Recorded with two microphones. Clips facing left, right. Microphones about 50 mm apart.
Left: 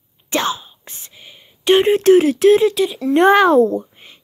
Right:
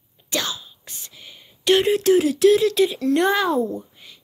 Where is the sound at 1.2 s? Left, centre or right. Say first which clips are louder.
Left 4 dB; centre.